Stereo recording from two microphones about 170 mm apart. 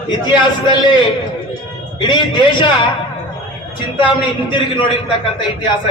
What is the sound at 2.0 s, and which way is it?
Speech, 30° left (ahead or behind).